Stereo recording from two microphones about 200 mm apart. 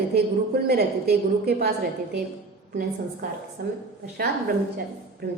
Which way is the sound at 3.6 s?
50° right (ahead or behind).